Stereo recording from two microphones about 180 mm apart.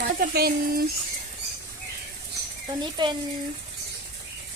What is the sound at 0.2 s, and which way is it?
Speech, 60° right (ahead or behind).